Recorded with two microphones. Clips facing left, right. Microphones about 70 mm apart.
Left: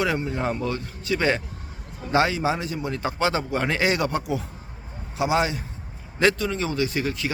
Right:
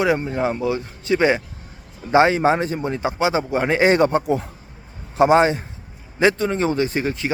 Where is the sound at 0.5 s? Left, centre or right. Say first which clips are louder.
Right 5 dB; centre; by 2.9 s right.